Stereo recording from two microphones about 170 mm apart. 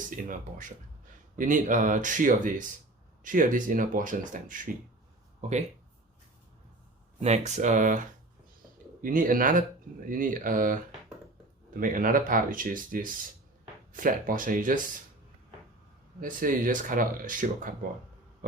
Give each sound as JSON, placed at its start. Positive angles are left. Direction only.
{"t": 0.1, "sound": "speech", "side_deg": -50}
{"t": 5.4, "sound": "speech", "side_deg": -40}
{"t": 7.2, "sound": "speech", "side_deg": -45}
{"t": 16.2, "sound": "speech", "side_deg": -55}